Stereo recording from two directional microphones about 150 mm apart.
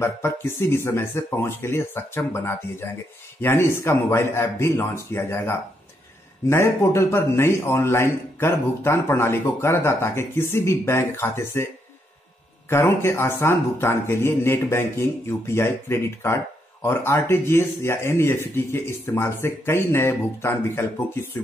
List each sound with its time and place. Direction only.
0.0 s a man's voice: 15° left (ahead or behind)